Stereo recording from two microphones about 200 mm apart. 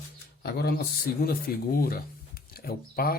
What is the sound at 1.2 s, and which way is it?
Speech, 45° left (ahead or behind).